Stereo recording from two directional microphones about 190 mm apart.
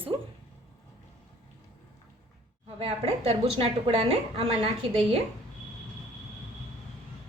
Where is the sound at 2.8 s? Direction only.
30° right (ahead or behind).